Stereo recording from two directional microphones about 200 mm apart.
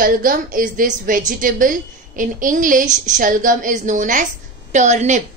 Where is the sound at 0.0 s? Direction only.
45° right (ahead or behind).